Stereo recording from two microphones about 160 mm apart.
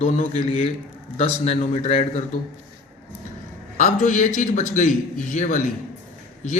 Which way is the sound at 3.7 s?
50° left (ahead or behind).